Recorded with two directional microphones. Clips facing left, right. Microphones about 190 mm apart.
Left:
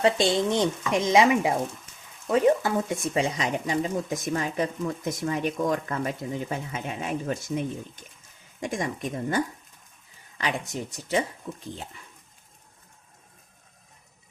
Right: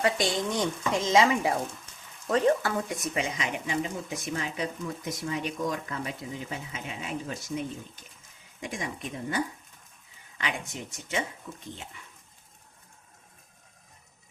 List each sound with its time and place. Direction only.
0.0 s stir: 25° left (ahead or behind)
2.3 s speech: 15° left (ahead or behind)
2.7 s speech: 25° left (ahead or behind); by 7.6 s 55° left (ahead or behind)
8.6 s speech: 50° left (ahead or behind)